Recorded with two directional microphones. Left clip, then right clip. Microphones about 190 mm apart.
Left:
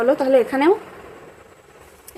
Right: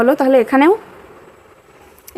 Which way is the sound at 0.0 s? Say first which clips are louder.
Right 4 dB; 30° right (ahead or behind).